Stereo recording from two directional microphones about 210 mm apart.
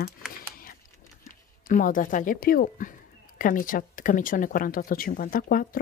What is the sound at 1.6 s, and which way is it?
Speech, 40° left (ahead or behind).